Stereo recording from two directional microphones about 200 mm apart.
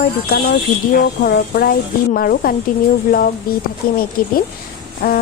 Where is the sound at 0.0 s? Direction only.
50° left (ahead or behind).